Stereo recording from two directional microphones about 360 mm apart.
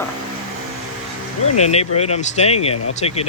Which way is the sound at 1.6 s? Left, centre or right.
Centre.